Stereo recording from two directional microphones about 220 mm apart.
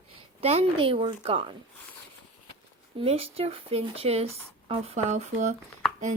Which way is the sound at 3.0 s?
25° right (ahead or behind).